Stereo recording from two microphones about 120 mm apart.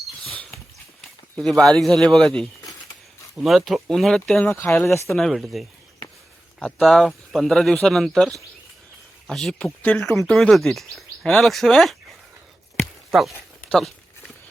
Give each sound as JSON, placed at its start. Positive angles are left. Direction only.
{"t": 1.4, "sound": "speech", "side_deg": 5}
{"t": 4.5, "sound": "speech", "side_deg": 20}
{"t": 5.1, "sound": "speech", "side_deg": 0}
{"t": 13.1, "sound": "a sound", "side_deg": 0}